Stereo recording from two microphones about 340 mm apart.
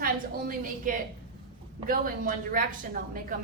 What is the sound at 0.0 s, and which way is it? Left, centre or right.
A woman's voice, right.